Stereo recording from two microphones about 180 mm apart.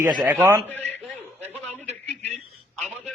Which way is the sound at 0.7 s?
10° left (ahead or behind).